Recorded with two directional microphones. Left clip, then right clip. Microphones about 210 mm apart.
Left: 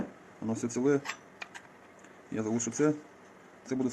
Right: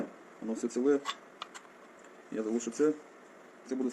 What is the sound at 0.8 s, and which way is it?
Speech, 40° left (ahead or behind).